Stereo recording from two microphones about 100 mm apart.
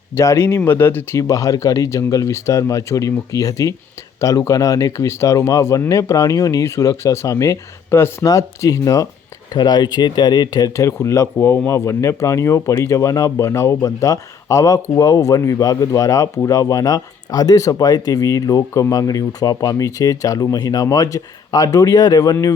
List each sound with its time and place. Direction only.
0.1 s speech: 25° left (ahead or behind)